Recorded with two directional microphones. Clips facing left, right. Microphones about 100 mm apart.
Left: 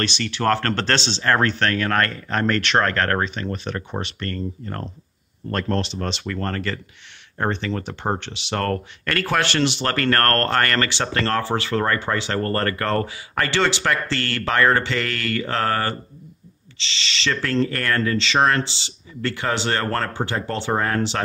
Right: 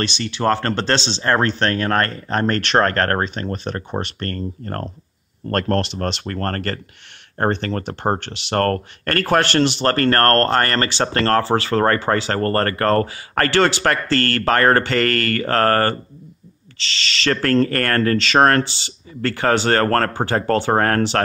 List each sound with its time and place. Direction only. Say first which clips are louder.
0.2 s speech: right 2 dB; 20° right (ahead or behind); by 21.2 s 55° right (ahead or behind)